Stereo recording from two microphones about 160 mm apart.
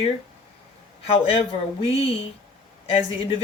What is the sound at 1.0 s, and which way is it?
Speech, 40° left (ahead or behind).